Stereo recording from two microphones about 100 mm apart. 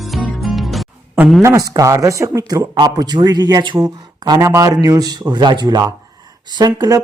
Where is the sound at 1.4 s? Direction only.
35° right (ahead or behind).